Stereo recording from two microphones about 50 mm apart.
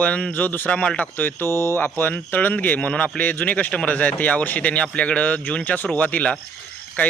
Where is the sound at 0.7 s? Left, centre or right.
Left.